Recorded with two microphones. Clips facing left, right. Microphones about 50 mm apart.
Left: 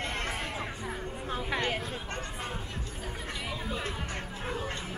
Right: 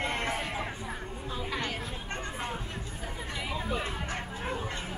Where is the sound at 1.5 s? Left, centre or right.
Left.